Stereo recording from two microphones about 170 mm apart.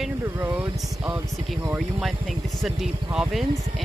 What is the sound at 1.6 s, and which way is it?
Speech, 5° right (ahead or behind).